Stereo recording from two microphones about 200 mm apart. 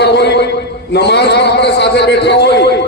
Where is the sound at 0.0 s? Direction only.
55° left (ahead or behind).